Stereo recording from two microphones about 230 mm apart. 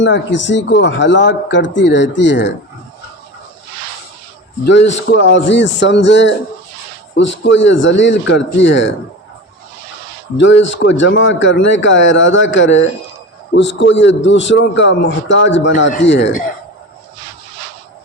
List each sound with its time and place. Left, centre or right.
0.0 s a man's voice: left
4.6 s a man's voice: left
7.4 s a man's voice: left
10.3 s a man's voice: left